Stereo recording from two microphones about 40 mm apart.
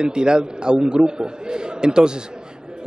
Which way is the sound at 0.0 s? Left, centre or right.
Right.